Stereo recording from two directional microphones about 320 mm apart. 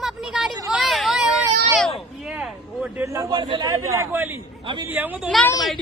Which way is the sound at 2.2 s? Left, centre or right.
Centre.